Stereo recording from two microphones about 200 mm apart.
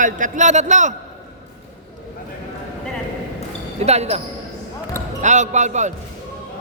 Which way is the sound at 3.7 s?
35° right (ahead or behind).